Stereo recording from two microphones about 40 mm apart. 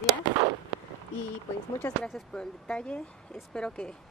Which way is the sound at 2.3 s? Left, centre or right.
Left.